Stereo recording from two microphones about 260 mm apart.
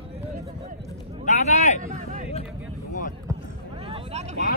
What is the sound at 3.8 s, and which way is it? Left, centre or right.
Vehicle, right.